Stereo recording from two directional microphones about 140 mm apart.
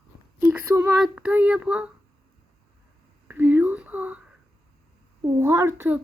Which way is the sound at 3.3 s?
15° right (ahead or behind).